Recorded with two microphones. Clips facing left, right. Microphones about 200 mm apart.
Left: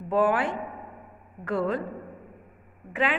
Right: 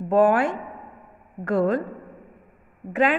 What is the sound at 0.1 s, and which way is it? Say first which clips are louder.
A woman's voice: right 5 dB; 45° right (ahead or behind).